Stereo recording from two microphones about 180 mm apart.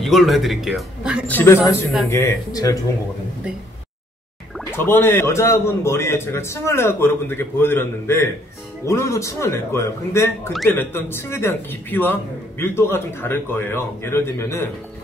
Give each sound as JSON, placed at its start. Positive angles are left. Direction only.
{"t": 0.0, "sound": "a man's voice", "side_deg": 0}
{"t": 1.2, "sound": "a man's voice", "side_deg": 10}
{"t": 4.7, "sound": "a man's voice", "side_deg": 10}